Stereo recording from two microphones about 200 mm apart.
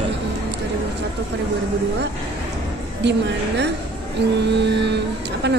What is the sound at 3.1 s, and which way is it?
Speech, 60° right (ahead or behind).